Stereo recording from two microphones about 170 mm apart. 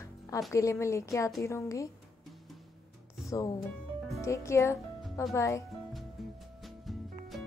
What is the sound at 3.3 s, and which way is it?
Speech, 20° left (ahead or behind).